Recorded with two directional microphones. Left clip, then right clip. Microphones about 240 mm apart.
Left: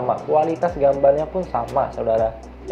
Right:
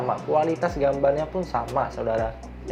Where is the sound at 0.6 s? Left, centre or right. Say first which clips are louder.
Left 5 dB; right.